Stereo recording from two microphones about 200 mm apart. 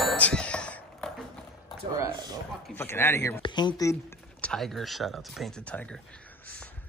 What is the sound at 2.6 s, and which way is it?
Speech, 10° left (ahead or behind).